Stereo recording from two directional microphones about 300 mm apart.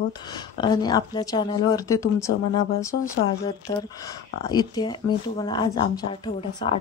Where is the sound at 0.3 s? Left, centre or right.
Centre.